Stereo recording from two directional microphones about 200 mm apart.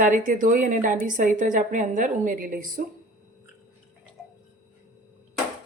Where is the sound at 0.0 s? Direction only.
40° right (ahead or behind).